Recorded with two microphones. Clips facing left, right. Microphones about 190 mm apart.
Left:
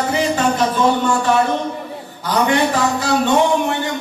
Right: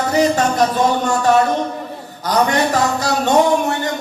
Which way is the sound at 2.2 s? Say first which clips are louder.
Even; 40° right (ahead or behind).